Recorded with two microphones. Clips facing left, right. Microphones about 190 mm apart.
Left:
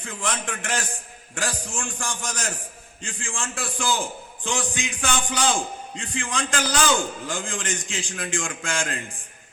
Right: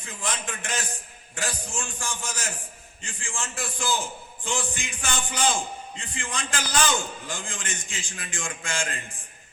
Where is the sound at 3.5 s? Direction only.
90° left.